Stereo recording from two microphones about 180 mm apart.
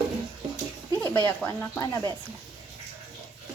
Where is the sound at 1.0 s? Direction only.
10° left (ahead or behind).